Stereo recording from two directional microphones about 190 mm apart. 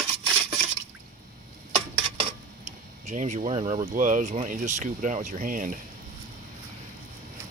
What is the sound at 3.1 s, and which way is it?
Speech, 40° right (ahead or behind).